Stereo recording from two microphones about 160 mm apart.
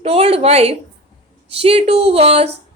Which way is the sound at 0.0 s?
35° right (ahead or behind).